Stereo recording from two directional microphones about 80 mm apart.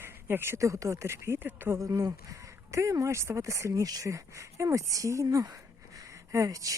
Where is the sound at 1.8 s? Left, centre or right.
Right.